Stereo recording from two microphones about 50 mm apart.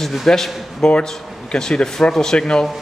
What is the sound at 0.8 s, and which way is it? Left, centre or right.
Speech, centre.